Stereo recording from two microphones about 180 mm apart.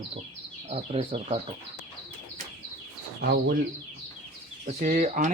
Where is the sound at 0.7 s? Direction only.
35° right (ahead or behind).